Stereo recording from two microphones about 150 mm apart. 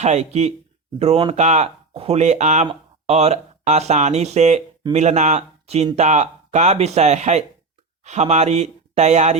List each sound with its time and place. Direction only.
0.0 s speech: 50° right (ahead or behind)